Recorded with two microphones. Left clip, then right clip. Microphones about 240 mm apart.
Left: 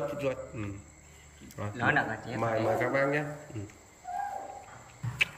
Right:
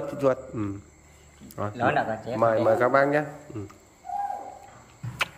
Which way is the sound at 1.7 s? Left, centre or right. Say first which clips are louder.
Right 3 dB; right.